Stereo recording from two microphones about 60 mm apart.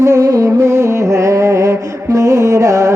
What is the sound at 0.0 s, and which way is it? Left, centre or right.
Music, right.